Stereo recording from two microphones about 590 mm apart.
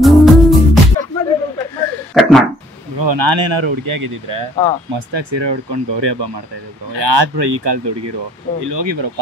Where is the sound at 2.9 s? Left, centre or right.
Right.